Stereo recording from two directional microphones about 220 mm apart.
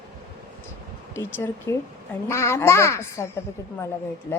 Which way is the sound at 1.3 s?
10° left (ahead or behind).